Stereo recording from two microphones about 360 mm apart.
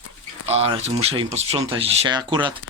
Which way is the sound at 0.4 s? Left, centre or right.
Centre.